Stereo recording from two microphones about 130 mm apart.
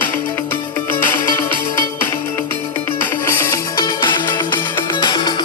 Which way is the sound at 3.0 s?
20° left (ahead or behind).